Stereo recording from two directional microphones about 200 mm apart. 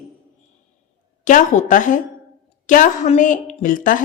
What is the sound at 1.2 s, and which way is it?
A woman's voice, 40° left (ahead or behind).